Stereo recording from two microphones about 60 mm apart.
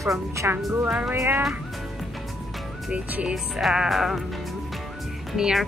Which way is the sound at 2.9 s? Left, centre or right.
Centre.